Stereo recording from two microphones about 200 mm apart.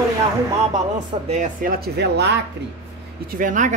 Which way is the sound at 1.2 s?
40° right (ahead or behind).